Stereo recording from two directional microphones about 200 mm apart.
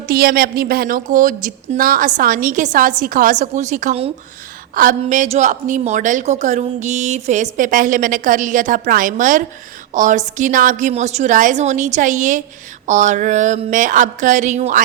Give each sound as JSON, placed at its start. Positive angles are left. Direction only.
{"t": 0.1, "sound": "a woman's voice", "side_deg": -50}